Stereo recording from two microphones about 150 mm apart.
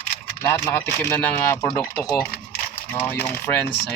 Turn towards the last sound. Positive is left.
turn(degrees=15)  # may be behind; listen again after turning